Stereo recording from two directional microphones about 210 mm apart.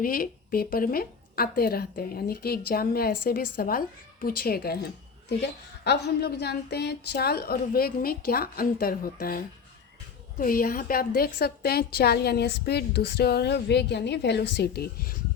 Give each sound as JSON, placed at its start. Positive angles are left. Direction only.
{"t": 0.0, "sound": "a woman's voice", "side_deg": 45}
{"t": 5.8, "sound": "a woman's voice", "side_deg": 50}